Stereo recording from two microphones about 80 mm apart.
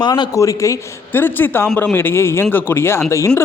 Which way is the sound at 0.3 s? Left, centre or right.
Left.